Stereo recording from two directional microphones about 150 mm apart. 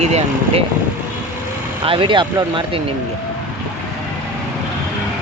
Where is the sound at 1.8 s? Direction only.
35° right (ahead or behind).